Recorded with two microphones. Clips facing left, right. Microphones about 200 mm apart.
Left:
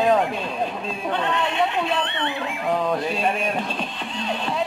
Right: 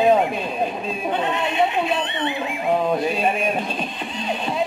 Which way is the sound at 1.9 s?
10° right (ahead or behind).